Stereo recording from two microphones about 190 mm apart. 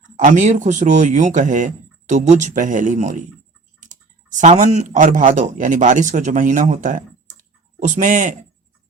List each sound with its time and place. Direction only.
0.2 s speech: 40° right (ahead or behind)